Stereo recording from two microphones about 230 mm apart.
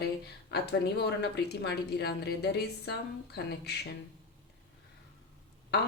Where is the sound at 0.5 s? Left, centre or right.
Left.